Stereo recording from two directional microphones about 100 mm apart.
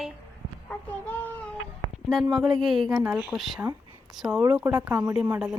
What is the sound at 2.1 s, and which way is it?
Speech, centre (ahead or behind).